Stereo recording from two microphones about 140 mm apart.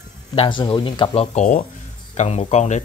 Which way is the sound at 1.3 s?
65° left (ahead or behind).